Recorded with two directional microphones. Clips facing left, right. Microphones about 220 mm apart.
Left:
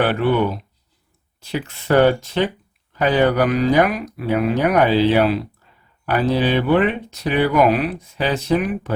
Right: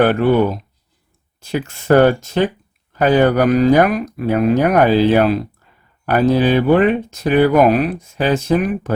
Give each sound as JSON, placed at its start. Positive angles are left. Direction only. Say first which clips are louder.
{"t": 0.0, "sound": "speech", "louder": "right 5 dB", "side_deg": -45}
{"t": 1.4, "sound": "speech", "louder": "right 4 dB", "side_deg": -45}